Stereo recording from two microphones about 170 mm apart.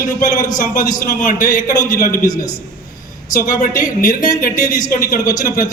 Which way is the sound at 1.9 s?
55° left (ahead or behind).